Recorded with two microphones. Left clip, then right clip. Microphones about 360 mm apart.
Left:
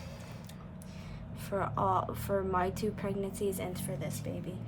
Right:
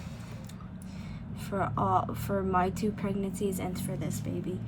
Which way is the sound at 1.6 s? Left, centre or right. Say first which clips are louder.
Right 3 dB; centre.